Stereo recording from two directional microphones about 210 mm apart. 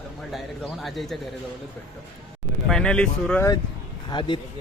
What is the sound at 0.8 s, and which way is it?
Speech, centre (ahead or behind).